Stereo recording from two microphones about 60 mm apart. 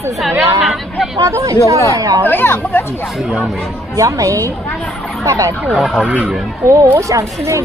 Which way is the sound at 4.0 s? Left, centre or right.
Right.